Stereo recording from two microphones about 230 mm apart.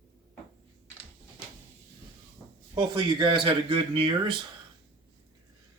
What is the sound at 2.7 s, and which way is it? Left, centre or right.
Speech, right.